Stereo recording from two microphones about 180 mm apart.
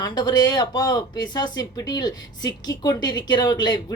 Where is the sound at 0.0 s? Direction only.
25° left (ahead or behind).